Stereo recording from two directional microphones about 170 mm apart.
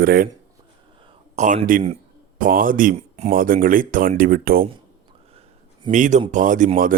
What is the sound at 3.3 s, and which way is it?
Speech, 55° right (ahead or behind).